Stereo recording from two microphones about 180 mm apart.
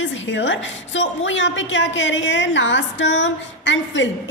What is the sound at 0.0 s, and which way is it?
A woman's voice, 90° left.